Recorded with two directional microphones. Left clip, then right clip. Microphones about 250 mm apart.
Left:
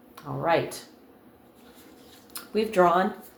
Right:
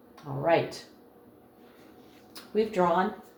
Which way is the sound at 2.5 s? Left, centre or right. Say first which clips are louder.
Left 4 dB; left.